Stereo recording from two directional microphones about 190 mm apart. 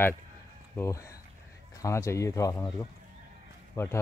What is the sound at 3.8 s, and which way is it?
Speech, 15° left (ahead or behind).